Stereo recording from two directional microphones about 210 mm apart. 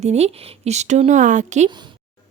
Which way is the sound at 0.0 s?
30° right (ahead or behind).